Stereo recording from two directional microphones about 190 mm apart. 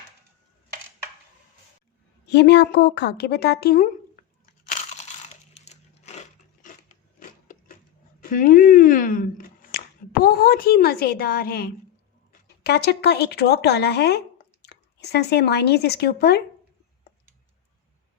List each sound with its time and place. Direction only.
2.2 s a woman's voice: 60° left (ahead or behind)
4.9 s a sound: 40° left (ahead or behind)
8.2 s a woman's voice: 45° left (ahead or behind)